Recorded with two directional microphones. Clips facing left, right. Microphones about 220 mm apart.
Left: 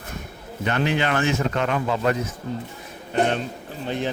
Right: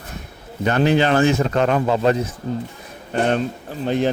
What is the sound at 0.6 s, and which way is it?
Speech, 40° right (ahead or behind).